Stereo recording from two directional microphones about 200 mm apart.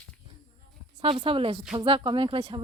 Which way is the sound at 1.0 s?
30° right (ahead or behind).